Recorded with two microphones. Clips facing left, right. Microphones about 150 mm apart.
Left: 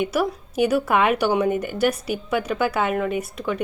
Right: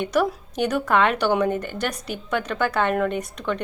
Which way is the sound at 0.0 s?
5° left (ahead or behind).